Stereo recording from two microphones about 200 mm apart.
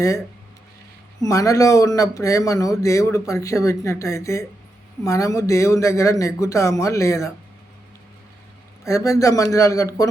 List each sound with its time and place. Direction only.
1.2 s speech: 15° left (ahead or behind)
8.8 s speech: 15° left (ahead or behind)